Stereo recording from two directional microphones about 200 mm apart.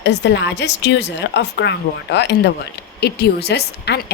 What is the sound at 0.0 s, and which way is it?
A woman's voice, 60° left (ahead or behind).